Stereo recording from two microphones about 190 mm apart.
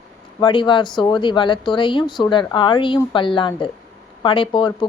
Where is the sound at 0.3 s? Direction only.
25° left (ahead or behind).